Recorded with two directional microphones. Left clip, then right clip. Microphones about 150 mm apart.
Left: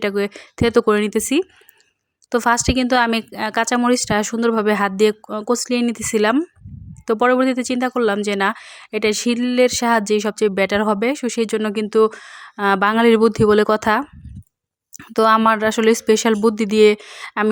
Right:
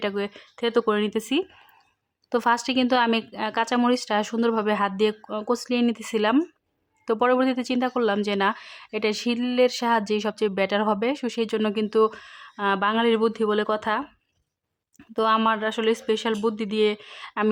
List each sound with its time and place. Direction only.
0.0 s speech: 25° left (ahead or behind)
15.1 s speech: 35° left (ahead or behind)